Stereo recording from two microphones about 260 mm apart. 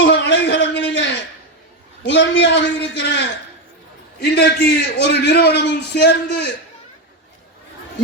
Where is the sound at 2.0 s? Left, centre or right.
Left.